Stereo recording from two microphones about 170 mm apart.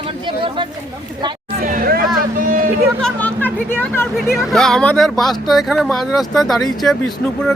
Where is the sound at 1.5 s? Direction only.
55° right (ahead or behind).